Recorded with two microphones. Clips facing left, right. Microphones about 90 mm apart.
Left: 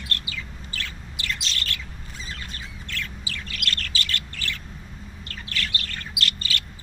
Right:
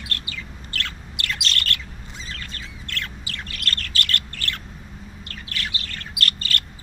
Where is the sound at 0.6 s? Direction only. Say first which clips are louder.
Right 3 dB; 65° right (ahead or behind).